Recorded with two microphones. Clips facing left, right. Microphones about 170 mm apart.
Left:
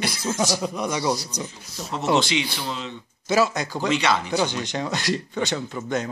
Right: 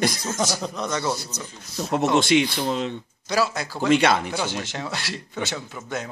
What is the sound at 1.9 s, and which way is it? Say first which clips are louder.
Speech: right 3 dB; 50° right (ahead or behind).